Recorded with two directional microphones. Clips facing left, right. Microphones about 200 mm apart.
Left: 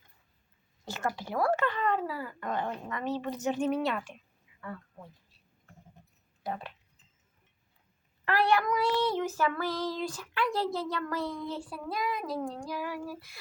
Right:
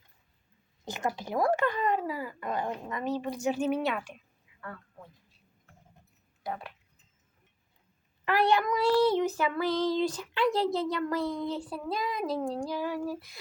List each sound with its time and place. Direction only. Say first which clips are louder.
0.9 s speech: right 1 dB; 15° right (ahead or behind); by 4.1 s centre (ahead or behind)
8.2 s a child's voice: right 1 dB; 15° right (ahead or behind)